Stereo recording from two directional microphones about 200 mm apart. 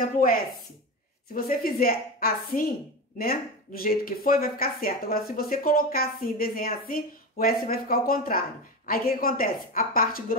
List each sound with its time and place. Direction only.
0.0 s speech: 45° left (ahead or behind)